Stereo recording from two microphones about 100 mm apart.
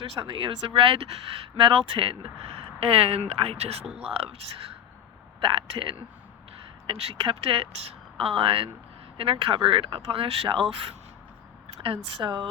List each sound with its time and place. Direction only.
0.3 s speech: 60° right (ahead or behind); by 3.8 s 90° right
3.9 s speech: 80° right
5.4 s speech: 60° right (ahead or behind)
11.8 s speech: 60° right (ahead or behind)